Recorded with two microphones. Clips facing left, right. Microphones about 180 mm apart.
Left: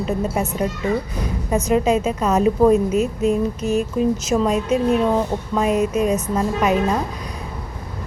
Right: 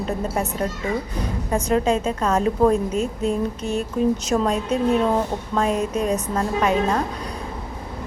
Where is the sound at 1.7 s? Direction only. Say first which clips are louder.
Left 2 dB; 10° left (ahead or behind).